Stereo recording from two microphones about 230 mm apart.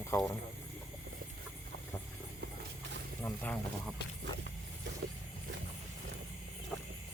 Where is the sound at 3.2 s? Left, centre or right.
Centre.